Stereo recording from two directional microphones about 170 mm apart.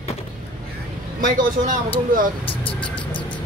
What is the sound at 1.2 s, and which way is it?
Speech, 50° right (ahead or behind).